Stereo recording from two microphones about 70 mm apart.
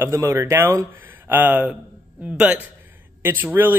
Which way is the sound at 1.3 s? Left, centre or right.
Right.